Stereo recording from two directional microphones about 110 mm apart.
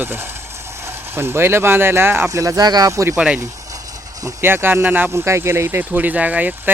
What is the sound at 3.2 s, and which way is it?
Speech, 10° right (ahead or behind).